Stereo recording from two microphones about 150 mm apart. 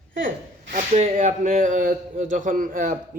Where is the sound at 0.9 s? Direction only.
50° right (ahead or behind).